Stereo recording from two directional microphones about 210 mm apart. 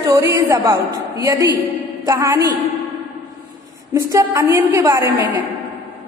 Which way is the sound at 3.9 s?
15° right (ahead or behind).